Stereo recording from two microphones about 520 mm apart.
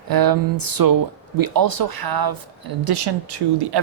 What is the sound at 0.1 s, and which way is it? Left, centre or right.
Speech, right.